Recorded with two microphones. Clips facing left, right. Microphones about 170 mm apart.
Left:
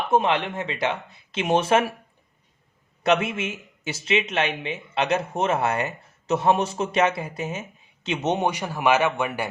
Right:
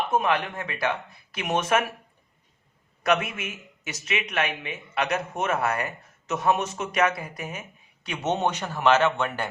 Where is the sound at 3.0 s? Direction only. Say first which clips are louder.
Left 3 dB; 25° left (ahead or behind).